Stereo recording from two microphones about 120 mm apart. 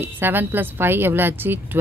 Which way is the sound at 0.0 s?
15° right (ahead or behind).